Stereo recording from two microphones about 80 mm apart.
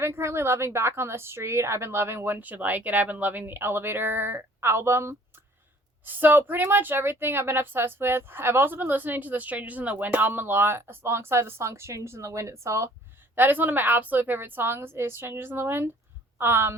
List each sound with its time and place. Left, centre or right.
0.0 s a woman's voice: right
13.3 s a woman's voice: right